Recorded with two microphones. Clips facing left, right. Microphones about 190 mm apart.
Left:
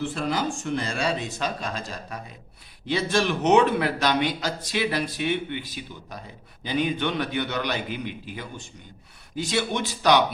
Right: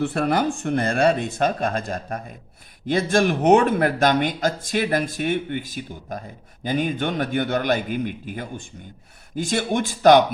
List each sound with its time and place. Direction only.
0.0 s speech: 60° right (ahead or behind)